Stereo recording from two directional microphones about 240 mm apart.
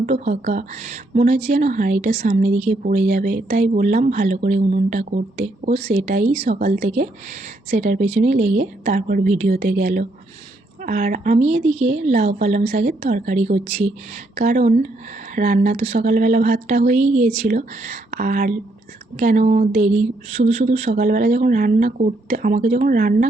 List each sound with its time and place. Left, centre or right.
0.0 s speech: right